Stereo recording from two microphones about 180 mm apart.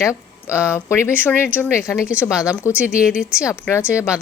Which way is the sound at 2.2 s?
15° left (ahead or behind).